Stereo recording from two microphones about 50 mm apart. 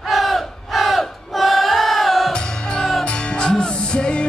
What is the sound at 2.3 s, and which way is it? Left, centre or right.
Music, centre.